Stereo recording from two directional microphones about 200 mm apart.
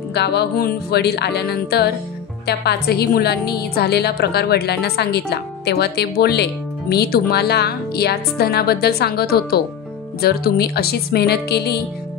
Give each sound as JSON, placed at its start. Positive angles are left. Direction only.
{"t": 0.1, "sound": "a woman's voice", "side_deg": 55}